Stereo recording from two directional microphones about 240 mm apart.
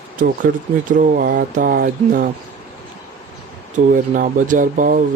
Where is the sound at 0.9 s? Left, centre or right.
Right.